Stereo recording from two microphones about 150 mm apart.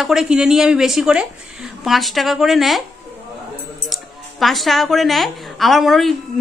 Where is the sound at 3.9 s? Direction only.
Centre (ahead or behind).